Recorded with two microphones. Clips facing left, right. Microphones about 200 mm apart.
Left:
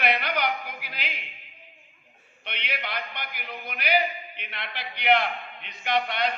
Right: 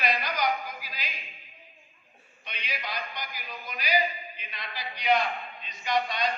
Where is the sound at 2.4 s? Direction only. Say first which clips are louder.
Left 3 dB; 65° left (ahead or behind).